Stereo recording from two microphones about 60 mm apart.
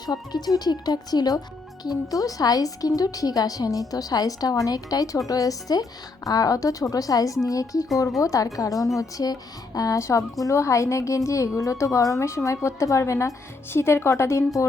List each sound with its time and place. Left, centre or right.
0.0 s a woman's voice: left
9.0 s a woman's voice: left